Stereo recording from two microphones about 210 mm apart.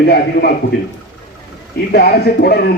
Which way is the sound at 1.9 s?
50° left (ahead or behind).